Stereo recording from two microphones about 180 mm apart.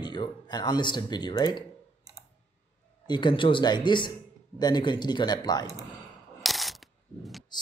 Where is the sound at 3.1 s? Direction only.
25° left (ahead or behind).